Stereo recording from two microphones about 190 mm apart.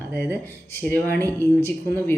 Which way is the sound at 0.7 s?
10° left (ahead or behind).